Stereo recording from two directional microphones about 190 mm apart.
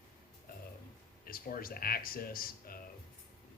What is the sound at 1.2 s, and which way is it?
Speech, 50° left (ahead or behind).